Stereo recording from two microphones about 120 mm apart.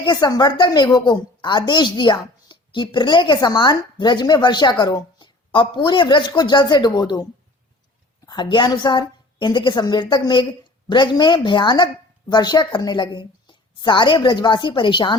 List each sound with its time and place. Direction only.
0.0 s a woman's voice: 35° left (ahead or behind)
8.3 s a woman's voice: 40° left (ahead or behind)